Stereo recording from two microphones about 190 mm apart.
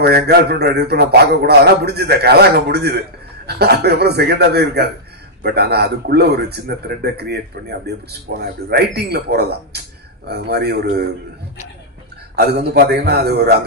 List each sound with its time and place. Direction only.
0.0 s a man's voice: 60° right (ahead or behind)
12.4 s a man's voice: 60° right (ahead or behind)